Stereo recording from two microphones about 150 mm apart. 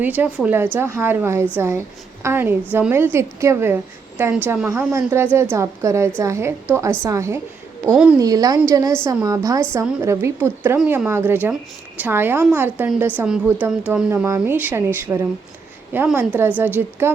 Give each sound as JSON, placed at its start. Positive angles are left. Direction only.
{"t": 0.0, "sound": "a woman's voice", "side_deg": -10}